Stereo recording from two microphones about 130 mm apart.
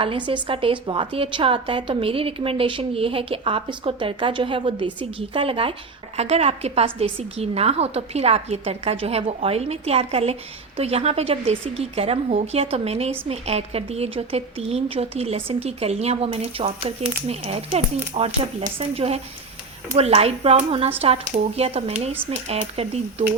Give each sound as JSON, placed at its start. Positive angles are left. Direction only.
{"t": 0.0, "sound": "a woman's voice", "side_deg": -40}